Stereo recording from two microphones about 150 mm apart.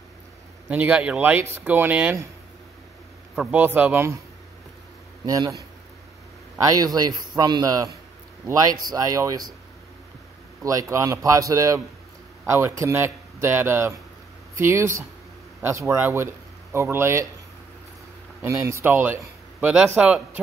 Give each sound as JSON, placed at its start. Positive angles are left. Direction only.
{"t": 0.7, "sound": "speech", "side_deg": -10}
{"t": 3.3, "sound": "speech", "side_deg": -10}
{"t": 5.2, "sound": "speech", "side_deg": -25}
{"t": 6.7, "sound": "speech", "side_deg": -25}
{"t": 8.9, "sound": "speech", "side_deg": -25}
{"t": 10.6, "sound": "speech", "side_deg": -20}
{"t": 18.4, "sound": "speech", "side_deg": -15}